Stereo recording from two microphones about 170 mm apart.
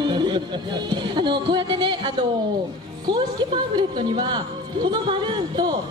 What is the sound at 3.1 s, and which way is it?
Speech, 25° right (ahead or behind).